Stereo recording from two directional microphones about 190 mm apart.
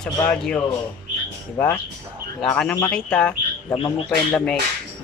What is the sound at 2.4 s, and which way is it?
Speech, 5° left (ahead or behind).